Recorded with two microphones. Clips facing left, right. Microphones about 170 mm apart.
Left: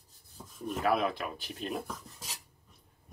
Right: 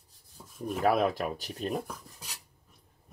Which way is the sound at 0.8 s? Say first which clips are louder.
Right 4 dB; 45° right (ahead or behind).